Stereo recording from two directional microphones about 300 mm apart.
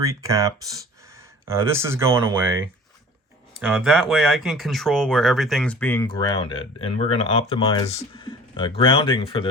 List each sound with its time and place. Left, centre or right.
0.0 s speech: centre